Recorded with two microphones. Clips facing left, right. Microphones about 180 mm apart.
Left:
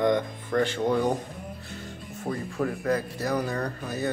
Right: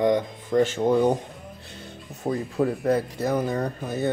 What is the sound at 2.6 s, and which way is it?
Speech, 25° right (ahead or behind).